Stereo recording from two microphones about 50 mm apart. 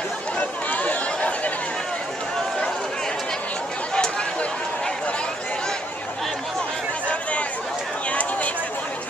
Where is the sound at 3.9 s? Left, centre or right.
Centre.